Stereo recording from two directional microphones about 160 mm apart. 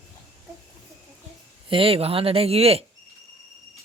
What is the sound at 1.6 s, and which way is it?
A man's voice, 35° right (ahead or behind).